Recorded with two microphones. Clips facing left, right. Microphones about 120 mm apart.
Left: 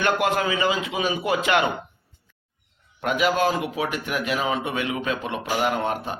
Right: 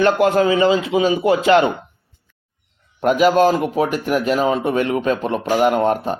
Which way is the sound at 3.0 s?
40° right (ahead or behind).